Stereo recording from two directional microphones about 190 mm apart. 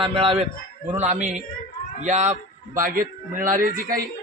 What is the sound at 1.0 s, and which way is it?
A man's voice, 40° right (ahead or behind).